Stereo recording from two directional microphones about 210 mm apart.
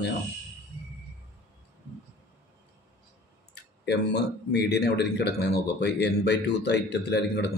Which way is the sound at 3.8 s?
55° left (ahead or behind).